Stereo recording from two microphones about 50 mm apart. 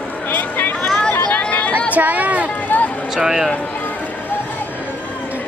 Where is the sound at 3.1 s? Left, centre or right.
Centre.